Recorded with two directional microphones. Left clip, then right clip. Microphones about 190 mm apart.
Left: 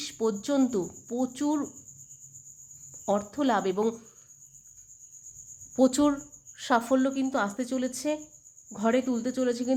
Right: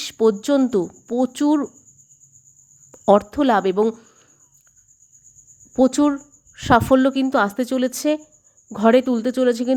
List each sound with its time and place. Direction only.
0.0 s speech: 40° right (ahead or behind)
2.9 s speech: 45° right (ahead or behind)
5.7 s speech: 30° right (ahead or behind)
6.6 s a woman's voice: 40° right (ahead or behind)